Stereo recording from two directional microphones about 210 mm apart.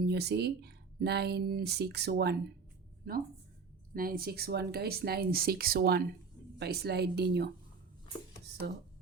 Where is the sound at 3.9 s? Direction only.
45° right (ahead or behind).